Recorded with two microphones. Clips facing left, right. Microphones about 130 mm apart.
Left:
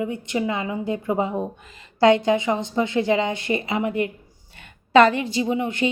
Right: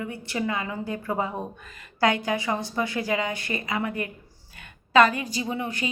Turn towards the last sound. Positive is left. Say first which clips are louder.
# left 7 dB
turn(degrees=25)  # may be behind; listen again after turning